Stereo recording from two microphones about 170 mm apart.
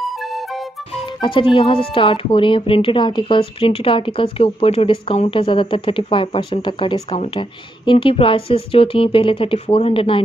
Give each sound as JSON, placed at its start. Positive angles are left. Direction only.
{"t": 0.2, "sound": "music", "side_deg": 0}
{"t": 0.9, "sound": "speech", "side_deg": 30}